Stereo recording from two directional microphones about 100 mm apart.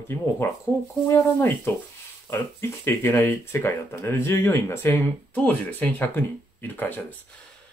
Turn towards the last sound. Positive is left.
turn(degrees=20)  # may be behind; listen again after turning